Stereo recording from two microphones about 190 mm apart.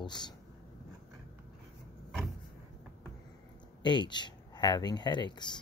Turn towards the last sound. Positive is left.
turn(degrees=25)  # may be behind; listen again after turning